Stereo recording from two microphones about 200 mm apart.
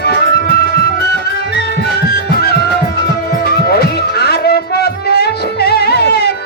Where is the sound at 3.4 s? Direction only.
50° left (ahead or behind).